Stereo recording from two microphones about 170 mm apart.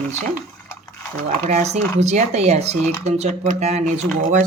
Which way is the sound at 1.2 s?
40° right (ahead or behind).